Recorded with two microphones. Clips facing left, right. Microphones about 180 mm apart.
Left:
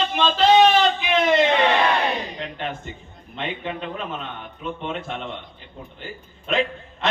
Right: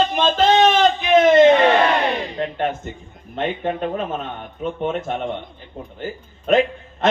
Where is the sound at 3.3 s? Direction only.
45° right (ahead or behind).